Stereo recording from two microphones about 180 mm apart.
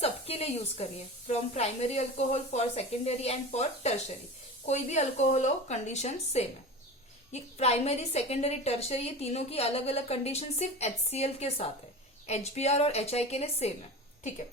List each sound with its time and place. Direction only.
0.0 s a woman's voice: 35° left (ahead or behind)